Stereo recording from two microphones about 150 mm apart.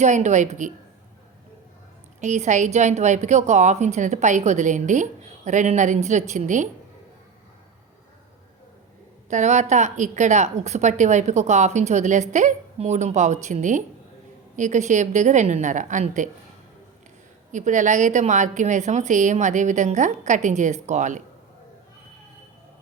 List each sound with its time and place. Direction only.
0.0 s a woman's voice: 55° right (ahead or behind)
2.2 s a woman's voice: 50° right (ahead or behind)
9.3 s a woman's voice: 50° right (ahead or behind)
17.5 s a woman's voice: 55° right (ahead or behind)